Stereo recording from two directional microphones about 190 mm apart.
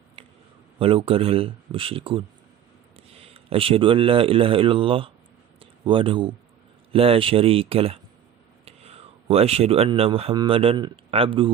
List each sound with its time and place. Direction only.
0.8 s speech: 30° right (ahead or behind)